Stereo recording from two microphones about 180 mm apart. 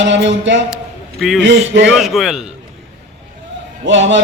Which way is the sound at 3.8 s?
90° right.